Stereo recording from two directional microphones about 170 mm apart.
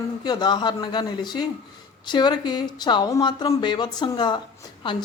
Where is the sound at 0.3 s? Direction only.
25° left (ahead or behind).